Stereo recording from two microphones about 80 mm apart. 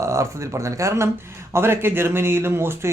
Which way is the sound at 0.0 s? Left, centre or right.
Right.